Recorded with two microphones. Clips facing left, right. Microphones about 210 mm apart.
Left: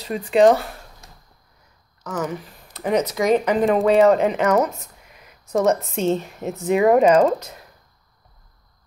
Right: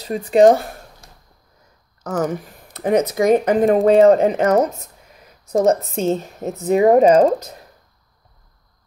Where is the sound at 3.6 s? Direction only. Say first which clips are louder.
Right 4 dB; 40° right (ahead or behind).